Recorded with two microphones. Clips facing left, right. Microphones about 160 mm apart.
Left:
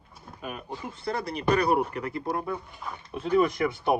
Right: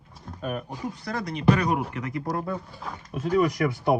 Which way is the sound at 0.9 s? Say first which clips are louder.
Left 4 dB; 30° left (ahead or behind).